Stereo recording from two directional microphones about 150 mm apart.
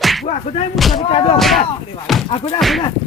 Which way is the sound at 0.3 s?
45° left (ahead or behind).